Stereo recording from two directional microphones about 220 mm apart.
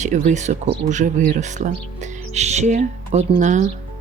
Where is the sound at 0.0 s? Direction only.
35° right (ahead or behind).